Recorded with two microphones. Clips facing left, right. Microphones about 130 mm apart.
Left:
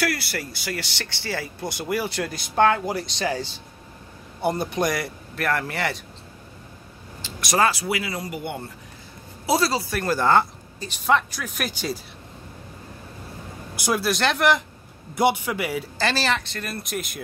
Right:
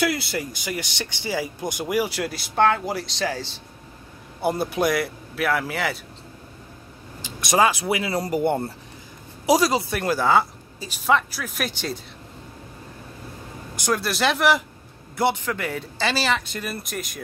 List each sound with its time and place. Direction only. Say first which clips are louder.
0.0 s speech: right 2 dB; 20° right (ahead or behind); by 5.9 s centre (ahead or behind)
7.2 s speech: right 2 dB; 20° right (ahead or behind); by 8.7 s 40° right (ahead or behind)
9.5 s speech: right 3 dB; 15° right (ahead or behind)
10.0 s speech: left 1 dB; 5° right (ahead or behind)
13.7 s speech: even; 10° left (ahead or behind)
14.0 s speech: even; centre (ahead or behind)
15.1 s a man's voice: left 2 dB; 15° left (ahead or behind)
16.0 s speech: right 1 dB; centre (ahead or behind)